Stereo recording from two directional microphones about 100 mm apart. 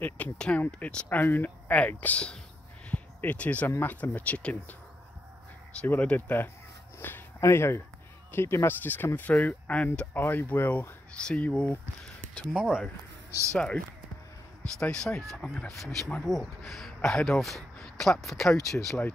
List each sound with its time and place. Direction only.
0.0 s speech: 10° left (ahead or behind)
2.9 s a sound: 15° left (ahead or behind)
3.7 s speech: 15° left (ahead or behind)
5.8 s speech: 15° left (ahead or behind)
12.5 s speech: 10° right (ahead or behind)
13.5 s speech: 10° left (ahead or behind)